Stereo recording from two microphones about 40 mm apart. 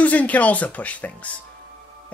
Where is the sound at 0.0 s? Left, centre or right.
Left.